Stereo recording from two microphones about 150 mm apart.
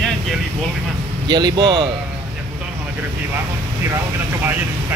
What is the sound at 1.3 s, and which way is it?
Speech, 30° right (ahead or behind).